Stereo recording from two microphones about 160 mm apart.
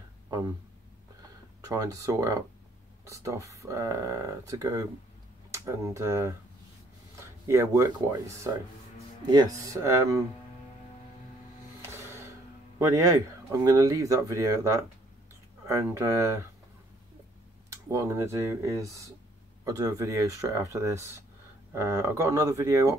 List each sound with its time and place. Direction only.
1.7 s speech: 20° right (ahead or behind)
11.8 s music: 15° right (ahead or behind)
12.7 s speech: 20° right (ahead or behind)
17.6 s speech: 15° right (ahead or behind)